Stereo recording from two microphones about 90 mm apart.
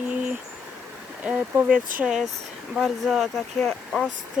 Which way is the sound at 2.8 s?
5° right (ahead or behind).